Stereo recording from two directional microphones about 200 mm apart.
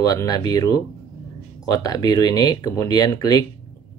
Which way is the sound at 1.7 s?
20° left (ahead or behind).